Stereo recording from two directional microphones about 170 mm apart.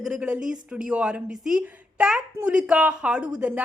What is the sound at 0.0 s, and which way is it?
A woman's voice, 5° right (ahead or behind).